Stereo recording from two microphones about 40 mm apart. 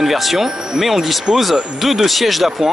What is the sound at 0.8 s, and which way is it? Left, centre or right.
Speech, centre.